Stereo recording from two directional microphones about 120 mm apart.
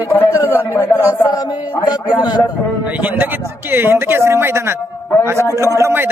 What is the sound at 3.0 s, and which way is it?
A man's voice, 15° right (ahead or behind).